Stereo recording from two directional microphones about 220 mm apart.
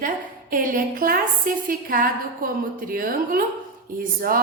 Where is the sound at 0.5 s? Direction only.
40° right (ahead or behind).